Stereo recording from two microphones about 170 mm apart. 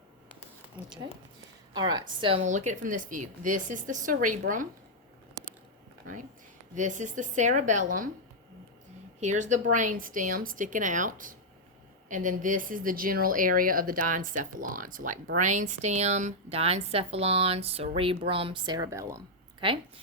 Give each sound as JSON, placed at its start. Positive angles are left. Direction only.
{"t": 0.8, "sound": "a woman's voice", "side_deg": -25}
{"t": 2.4, "sound": "speech", "side_deg": -45}
{"t": 6.7, "sound": "speech", "side_deg": -45}
{"t": 9.2, "sound": "a woman's voice", "side_deg": -45}
{"t": 19.5, "sound": "speech", "side_deg": -30}